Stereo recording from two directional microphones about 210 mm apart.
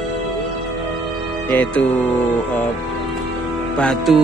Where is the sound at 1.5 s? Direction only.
5° left (ahead or behind).